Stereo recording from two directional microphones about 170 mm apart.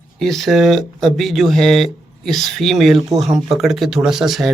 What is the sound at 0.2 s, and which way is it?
Speech, centre (ahead or behind).